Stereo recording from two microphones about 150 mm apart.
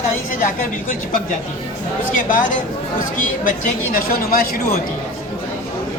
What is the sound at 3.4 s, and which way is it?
Speech, 65° left (ahead or behind).